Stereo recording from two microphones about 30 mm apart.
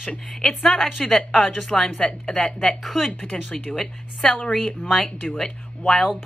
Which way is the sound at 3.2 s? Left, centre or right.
Left.